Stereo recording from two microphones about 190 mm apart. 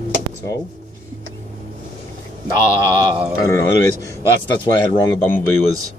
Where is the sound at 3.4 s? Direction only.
15° left (ahead or behind).